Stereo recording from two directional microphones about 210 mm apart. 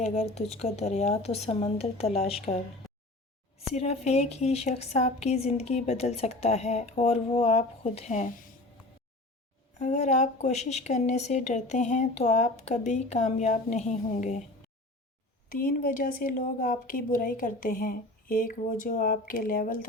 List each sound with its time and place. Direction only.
0.0 s speech: 35° left (ahead or behind)
2.8 s a sound: centre (ahead or behind)
3.8 s speech: 30° left (ahead or behind)
9.7 s speech: 35° left (ahead or behind)
15.5 s speech: 40° left (ahead or behind)